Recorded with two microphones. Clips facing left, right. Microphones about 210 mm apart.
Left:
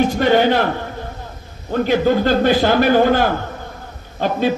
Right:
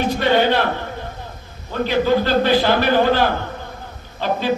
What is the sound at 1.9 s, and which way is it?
A man's voice, 50° left (ahead or behind).